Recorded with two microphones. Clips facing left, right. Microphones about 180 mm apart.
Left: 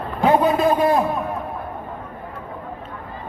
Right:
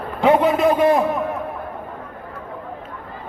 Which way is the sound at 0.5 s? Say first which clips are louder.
Right 2 dB; 25° left (ahead or behind).